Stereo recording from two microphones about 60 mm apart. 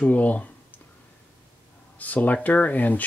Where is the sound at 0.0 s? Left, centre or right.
Left.